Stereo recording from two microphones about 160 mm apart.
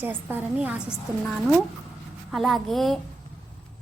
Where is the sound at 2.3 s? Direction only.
Centre (ahead or behind).